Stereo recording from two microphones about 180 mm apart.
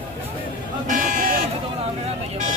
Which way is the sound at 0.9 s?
50° right (ahead or behind).